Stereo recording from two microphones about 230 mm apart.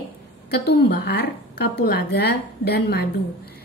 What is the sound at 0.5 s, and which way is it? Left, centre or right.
A woman's voice, left.